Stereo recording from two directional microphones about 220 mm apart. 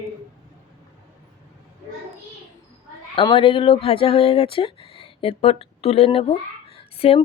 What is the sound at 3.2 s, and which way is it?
A woman's voice, 25° left (ahead or behind).